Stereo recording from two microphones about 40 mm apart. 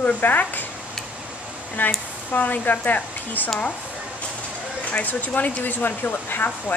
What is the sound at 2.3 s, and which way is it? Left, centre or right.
Speech, left.